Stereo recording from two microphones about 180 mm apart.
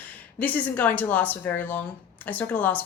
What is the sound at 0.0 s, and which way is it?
A woman's voice, 10° left (ahead or behind).